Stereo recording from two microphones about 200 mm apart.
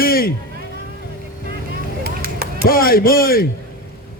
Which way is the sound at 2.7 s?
45° left (ahead or behind).